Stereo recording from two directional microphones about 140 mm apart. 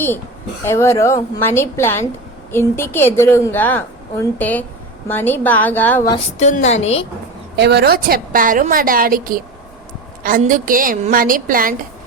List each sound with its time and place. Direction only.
0.6 s a woman's voice: 20° left (ahead or behind)
6.4 s a woman's voice: 55° left (ahead or behind)
7.9 s a woman's voice: 90° right